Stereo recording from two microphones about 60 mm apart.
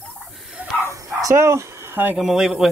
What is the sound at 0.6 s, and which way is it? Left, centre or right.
Bow-wow, right.